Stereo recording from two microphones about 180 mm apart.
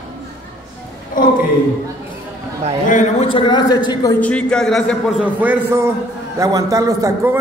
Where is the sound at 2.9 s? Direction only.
45° left (ahead or behind).